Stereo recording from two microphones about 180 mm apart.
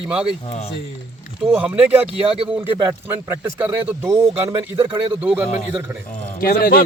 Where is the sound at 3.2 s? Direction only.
10° right (ahead or behind).